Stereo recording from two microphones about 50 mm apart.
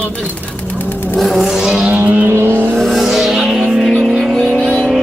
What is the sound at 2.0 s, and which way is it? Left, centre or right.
Speech, right.